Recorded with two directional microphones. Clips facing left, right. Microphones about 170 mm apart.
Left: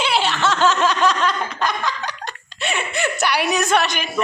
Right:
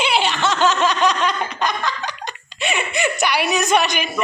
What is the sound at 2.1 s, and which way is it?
Giggle, 15° right (ahead or behind).